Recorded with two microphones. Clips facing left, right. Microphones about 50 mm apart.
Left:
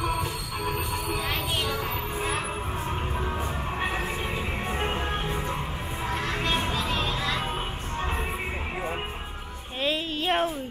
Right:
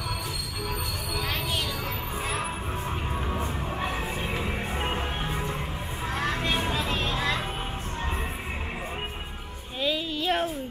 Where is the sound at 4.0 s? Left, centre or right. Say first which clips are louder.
Even; centre.